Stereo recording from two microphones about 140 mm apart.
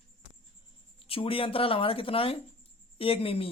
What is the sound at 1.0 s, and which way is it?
Speech, 40° left (ahead or behind).